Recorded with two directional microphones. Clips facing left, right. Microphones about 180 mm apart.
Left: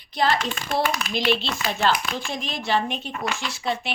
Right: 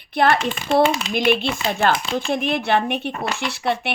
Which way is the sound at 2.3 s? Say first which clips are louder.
Right 5 dB; 60° right (ahead or behind).